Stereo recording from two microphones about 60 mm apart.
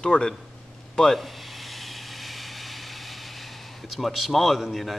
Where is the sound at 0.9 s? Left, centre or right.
Centre.